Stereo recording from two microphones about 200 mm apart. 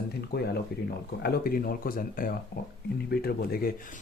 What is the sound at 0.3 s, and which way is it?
Speech, 55° left (ahead or behind).